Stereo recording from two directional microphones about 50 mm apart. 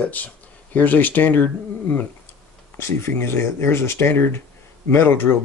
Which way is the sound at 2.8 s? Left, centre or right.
Left.